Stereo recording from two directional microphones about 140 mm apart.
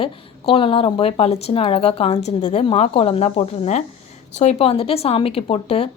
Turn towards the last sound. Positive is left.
turn(degrees=45)  # may be behind; listen again after turning